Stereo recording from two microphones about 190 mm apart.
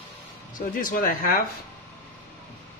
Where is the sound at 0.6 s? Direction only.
45° left (ahead or behind).